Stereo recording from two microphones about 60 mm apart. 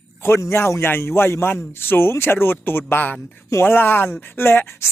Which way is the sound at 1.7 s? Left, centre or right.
Left.